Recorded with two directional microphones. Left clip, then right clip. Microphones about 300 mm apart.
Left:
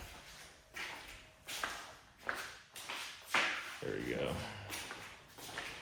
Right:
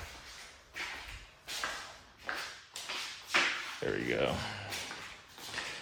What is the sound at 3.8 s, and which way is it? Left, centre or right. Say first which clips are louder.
Music: right 8 dB; centre.